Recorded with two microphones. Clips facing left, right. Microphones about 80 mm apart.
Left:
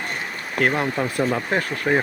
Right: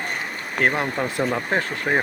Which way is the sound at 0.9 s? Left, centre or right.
Centre.